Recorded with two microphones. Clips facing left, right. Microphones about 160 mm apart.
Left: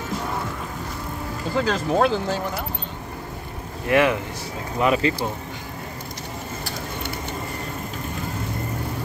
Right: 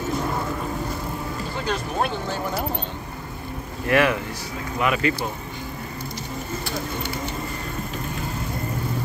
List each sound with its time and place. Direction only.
1.6 s speech: 90° left
3.9 s speech: 20° left (ahead or behind)
4.7 s speech: 30° left (ahead or behind)